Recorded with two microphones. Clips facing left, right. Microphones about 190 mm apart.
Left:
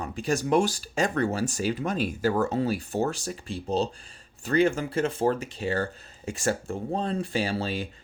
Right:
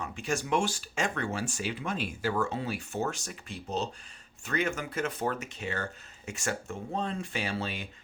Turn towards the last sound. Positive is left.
turn(degrees=35)  # may be behind; listen again after turning